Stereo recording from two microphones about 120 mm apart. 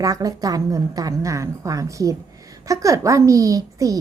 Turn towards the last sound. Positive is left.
turn(degrees=-30)  # may be behind; listen again after turning